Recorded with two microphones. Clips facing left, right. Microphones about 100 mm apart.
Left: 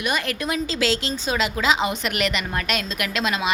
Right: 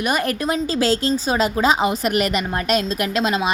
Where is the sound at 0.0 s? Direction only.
40° right (ahead or behind).